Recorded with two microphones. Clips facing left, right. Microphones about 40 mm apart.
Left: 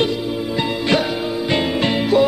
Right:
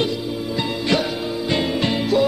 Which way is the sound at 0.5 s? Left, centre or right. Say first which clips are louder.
Left 2 dB; left.